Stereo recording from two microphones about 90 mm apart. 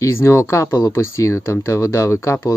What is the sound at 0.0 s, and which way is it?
Speech, 30° left (ahead or behind).